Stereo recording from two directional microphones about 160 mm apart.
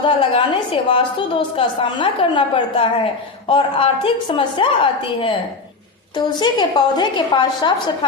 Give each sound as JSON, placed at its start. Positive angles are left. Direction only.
{"t": 0.0, "sound": "a woman's voice", "side_deg": 30}